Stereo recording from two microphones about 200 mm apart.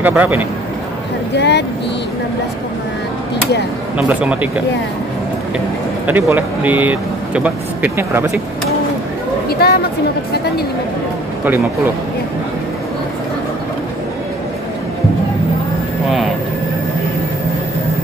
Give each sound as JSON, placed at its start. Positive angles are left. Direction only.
{"t": 0.0, "sound": "speech", "side_deg": -10}
{"t": 1.3, "sound": "speech", "side_deg": 60}
{"t": 4.1, "sound": "speech", "side_deg": -5}
{"t": 6.0, "sound": "speech", "side_deg": -10}
{"t": 9.5, "sound": "speech", "side_deg": 50}
{"t": 11.4, "sound": "speech", "side_deg": -10}